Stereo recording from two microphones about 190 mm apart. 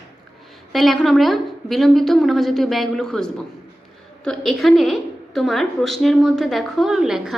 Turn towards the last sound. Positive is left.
turn(degrees=0)  # may be behind; listen again after turning